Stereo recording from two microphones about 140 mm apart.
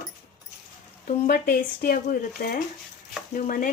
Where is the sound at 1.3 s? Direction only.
90° left.